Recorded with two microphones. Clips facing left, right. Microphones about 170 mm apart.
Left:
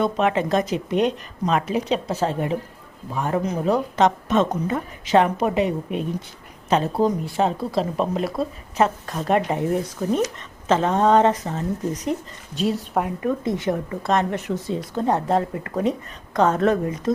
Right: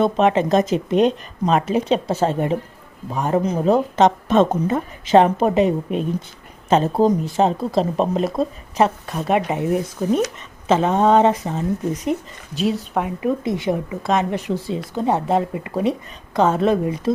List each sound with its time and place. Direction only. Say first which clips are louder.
0.0 s speech: right 4 dB; 25° right (ahead or behind)
9.0 s a woman's voice: right 1 dB; 10° right (ahead or behind)
13.1 s a woman's voice: right 2 dB; 10° right (ahead or behind)